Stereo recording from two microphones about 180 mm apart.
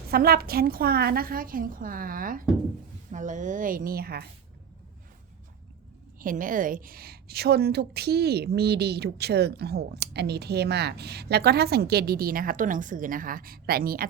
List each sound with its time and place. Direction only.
0.1 s a woman's voice: 55° right (ahead or behind)
6.1 s a woman's voice: 50° right (ahead or behind)